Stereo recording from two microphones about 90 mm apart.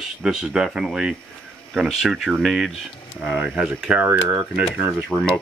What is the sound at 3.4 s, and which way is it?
Speech, 15° right (ahead or behind).